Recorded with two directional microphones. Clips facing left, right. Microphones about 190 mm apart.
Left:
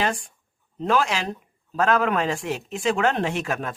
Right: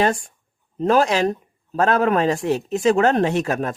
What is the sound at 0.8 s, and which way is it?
Speech, 40° right (ahead or behind).